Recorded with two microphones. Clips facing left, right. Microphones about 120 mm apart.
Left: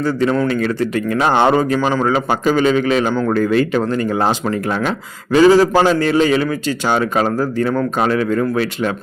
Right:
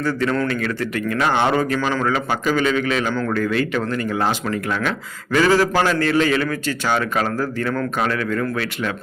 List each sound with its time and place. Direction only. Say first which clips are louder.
0.0 s a man's voice: left 4 dB; 20° left (ahead or behind)
5.3 s a man's voice: left 6 dB; 20° left (ahead or behind)